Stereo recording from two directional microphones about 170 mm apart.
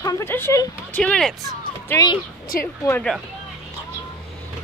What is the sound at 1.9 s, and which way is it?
Speech, 20° left (ahead or behind).